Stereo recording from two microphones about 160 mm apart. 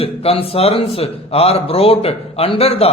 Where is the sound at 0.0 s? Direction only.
35° left (ahead or behind).